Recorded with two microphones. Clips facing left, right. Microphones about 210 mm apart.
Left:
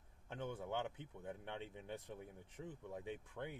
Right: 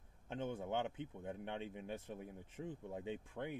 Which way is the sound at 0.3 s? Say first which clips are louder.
Right 3 dB; 20° right (ahead or behind).